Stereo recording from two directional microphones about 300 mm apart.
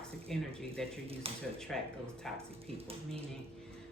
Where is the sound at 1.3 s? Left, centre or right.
Centre.